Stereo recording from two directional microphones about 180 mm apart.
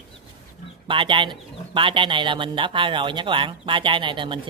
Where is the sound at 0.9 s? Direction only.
30° right (ahead or behind).